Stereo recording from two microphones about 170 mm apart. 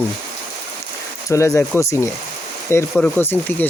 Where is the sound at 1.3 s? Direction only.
15° left (ahead or behind).